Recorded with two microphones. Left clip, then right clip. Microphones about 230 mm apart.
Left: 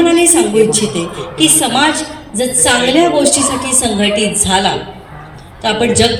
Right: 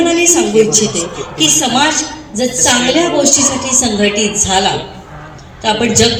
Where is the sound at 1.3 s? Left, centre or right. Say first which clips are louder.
Even; left.